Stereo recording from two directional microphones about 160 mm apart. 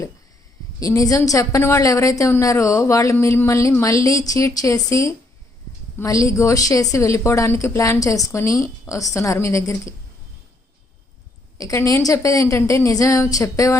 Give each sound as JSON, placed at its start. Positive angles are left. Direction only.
{"t": 0.8, "sound": "a woman's voice", "side_deg": 20}
{"t": 11.5, "sound": "a woman's voice", "side_deg": 20}